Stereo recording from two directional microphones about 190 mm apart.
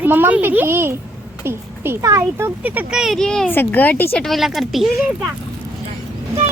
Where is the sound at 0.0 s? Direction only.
10° right (ahead or behind).